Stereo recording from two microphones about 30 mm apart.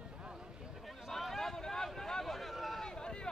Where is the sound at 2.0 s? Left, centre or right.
Centre.